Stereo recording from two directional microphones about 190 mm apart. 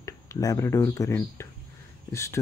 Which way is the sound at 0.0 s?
15° left (ahead or behind).